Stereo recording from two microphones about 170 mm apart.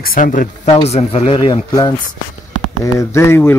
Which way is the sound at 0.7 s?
35° left (ahead or behind).